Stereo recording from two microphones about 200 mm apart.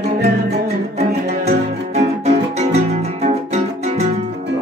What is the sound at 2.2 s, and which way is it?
Music, 35° right (ahead or behind).